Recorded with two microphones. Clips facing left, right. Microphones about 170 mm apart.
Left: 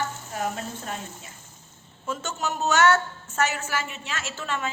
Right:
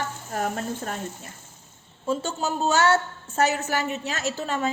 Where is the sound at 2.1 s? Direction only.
30° right (ahead or behind).